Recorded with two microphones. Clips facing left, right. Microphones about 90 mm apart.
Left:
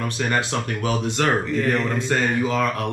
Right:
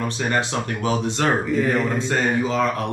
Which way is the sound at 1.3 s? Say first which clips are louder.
Right 1 dB; 10° right (ahead or behind).